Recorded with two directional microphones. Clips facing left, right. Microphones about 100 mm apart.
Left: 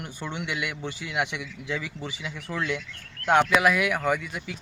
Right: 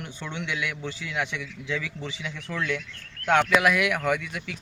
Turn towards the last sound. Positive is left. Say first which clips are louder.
# even
turn(degrees=5)  # may be behind; listen again after turning